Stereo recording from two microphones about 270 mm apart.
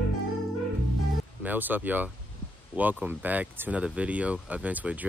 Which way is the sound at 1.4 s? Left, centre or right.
Centre.